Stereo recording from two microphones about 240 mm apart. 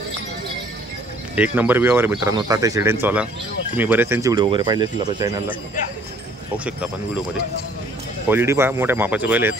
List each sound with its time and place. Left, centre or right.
1.3 s speech: centre
6.6 s speech: centre
8.3 s speech: centre